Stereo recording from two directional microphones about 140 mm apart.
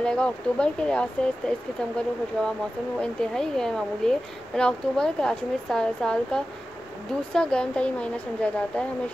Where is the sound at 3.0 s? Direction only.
5° left (ahead or behind).